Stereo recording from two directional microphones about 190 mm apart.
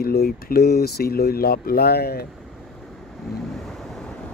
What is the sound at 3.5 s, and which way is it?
Waves, centre (ahead or behind).